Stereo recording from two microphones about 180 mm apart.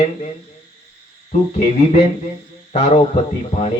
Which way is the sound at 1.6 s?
35° left (ahead or behind).